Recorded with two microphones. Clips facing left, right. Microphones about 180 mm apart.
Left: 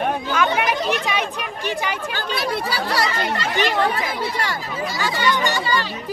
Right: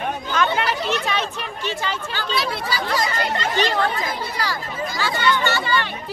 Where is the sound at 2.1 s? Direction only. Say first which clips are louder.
Left 1 dB; 60° left (ahead or behind).